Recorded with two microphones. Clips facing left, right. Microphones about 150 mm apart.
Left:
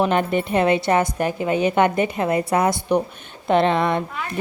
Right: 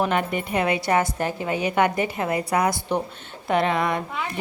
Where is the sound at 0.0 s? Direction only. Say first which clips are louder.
Left 4 dB; 30° left (ahead or behind).